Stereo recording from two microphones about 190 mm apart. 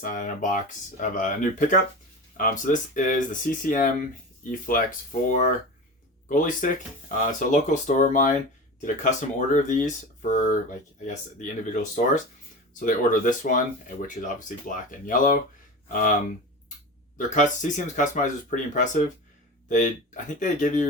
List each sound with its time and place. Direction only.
0.0 s speech: 45° left (ahead or behind)
17.2 s speech: 40° left (ahead or behind)